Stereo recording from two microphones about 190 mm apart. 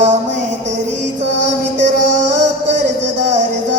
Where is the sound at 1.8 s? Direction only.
40° right (ahead or behind).